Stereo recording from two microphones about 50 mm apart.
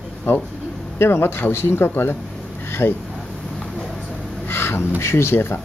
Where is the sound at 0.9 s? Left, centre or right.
Left.